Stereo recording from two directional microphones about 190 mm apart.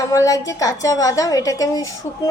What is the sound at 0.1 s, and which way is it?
A woman's voice, 15° left (ahead or behind).